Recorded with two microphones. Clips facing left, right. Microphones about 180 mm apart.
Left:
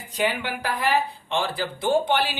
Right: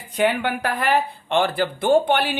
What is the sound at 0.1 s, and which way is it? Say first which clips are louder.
Speech: right 5 dB; 55° right (ahead or behind).